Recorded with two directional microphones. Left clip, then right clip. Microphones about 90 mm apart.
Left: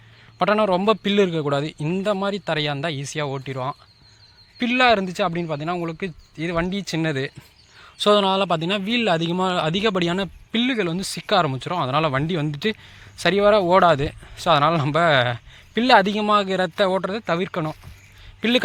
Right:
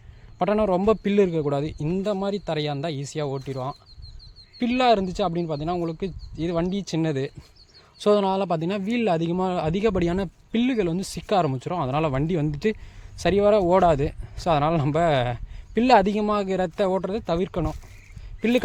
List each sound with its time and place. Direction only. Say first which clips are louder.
0.3 s a man's voice: left 3 dB; 25° right (ahead or behind)
4.6 s speech: left 3 dB; 25° right (ahead or behind)
10.5 s speech: left 1 dB; 35° right (ahead or behind)
15.8 s speech: left 2 dB; 35° right (ahead or behind)